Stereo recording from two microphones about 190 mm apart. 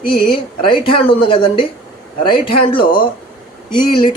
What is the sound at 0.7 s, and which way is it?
Speech, 25° left (ahead or behind).